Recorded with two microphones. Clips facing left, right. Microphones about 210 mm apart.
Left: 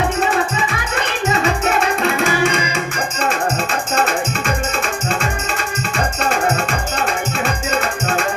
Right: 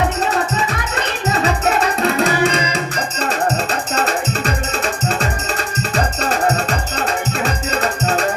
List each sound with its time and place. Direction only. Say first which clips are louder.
2.0 s music: right 1 dB; 35° right (ahead or behind)